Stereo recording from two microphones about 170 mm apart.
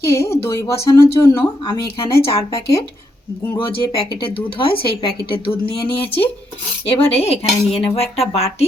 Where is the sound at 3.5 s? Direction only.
30° left (ahead or behind).